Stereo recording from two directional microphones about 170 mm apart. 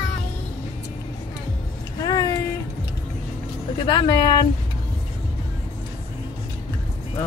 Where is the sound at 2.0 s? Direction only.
20° left (ahead or behind).